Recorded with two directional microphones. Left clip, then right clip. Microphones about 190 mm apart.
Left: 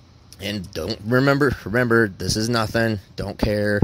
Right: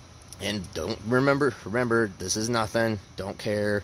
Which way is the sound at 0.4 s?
40° left (ahead or behind).